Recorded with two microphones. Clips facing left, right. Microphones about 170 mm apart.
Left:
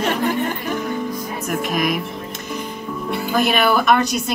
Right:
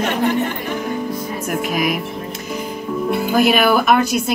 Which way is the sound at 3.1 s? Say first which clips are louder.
Right 3 dB; 5° right (ahead or behind).